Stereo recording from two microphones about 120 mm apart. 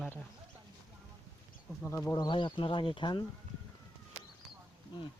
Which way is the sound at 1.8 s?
20° left (ahead or behind).